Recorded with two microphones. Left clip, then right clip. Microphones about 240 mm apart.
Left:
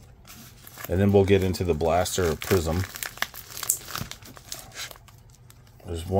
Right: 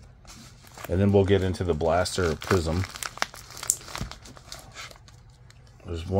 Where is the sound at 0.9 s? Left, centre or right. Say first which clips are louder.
Left 1 dB; centre.